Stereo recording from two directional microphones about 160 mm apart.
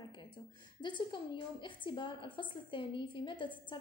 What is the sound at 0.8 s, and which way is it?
A woman's voice, 30° left (ahead or behind).